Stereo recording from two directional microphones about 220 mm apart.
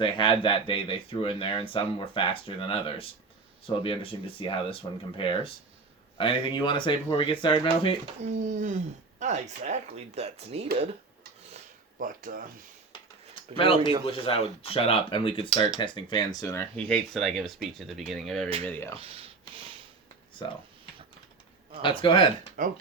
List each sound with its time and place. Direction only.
0.0 s speech: 20° left (ahead or behind)
8.2 s speech: 35° right (ahead or behind)
11.9 s speech: 40° right (ahead or behind)
13.6 s speech: 25° left (ahead or behind); by 18.4 s centre (ahead or behind)
18.4 s speech: 25° right (ahead or behind)
18.7 s speech: 10° left (ahead or behind)
18.9 s rub: 25° right (ahead or behind)
21.8 s speech: 20° left (ahead or behind)
22.6 s speech: 40° right (ahead or behind)